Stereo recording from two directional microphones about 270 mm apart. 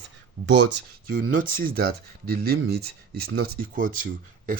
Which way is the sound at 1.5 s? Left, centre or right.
Right.